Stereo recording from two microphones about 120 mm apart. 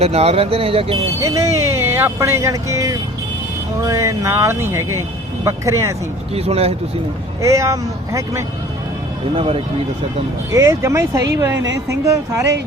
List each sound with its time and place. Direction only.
0.0 s speech: 60° right (ahead or behind)
1.2 s speech: 25° right (ahead or behind)
6.3 s speech: 55° right (ahead or behind)
7.4 s speech: 25° right (ahead or behind)
10.5 s speech: 25° right (ahead or behind)